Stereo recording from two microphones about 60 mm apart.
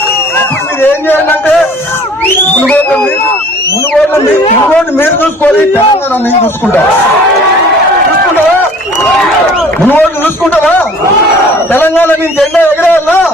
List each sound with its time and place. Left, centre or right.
0.3 s music: left
4.7 s a man's voice: left
9.9 s a man's voice: left